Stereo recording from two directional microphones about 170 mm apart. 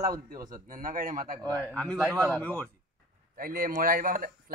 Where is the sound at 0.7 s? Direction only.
55° right (ahead or behind).